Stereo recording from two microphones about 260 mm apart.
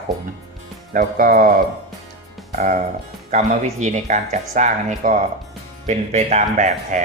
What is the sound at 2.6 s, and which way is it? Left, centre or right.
A man's voice, right.